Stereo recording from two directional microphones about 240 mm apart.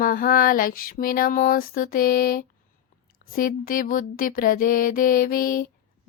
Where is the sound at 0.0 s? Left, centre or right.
Left.